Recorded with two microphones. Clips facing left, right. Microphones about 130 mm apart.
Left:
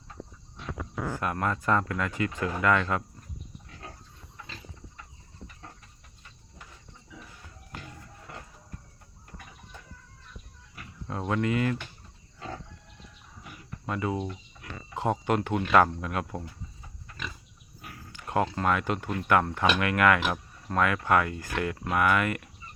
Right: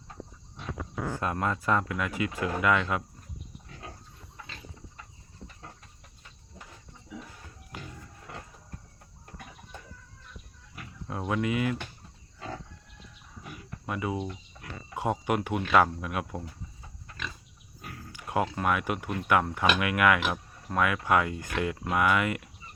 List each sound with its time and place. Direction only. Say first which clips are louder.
1.2 s speech: even; 20° right (ahead or behind)
11.1 s speech: left 1 dB; 10° right (ahead or behind)
13.8 s speech: left 2 dB; 10° right (ahead or behind)
18.1 s a sound: left 1 dB; 15° right (ahead or behind)
18.5 s speech: left 1 dB; 10° right (ahead or behind)